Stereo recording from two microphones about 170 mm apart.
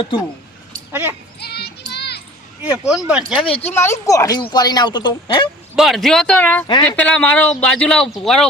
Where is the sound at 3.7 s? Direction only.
15° left (ahead or behind).